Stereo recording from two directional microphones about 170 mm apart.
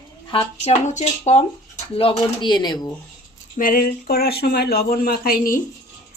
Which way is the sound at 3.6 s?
55° left (ahead or behind).